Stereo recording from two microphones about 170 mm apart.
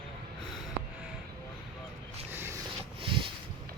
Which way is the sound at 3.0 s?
30° right (ahead or behind).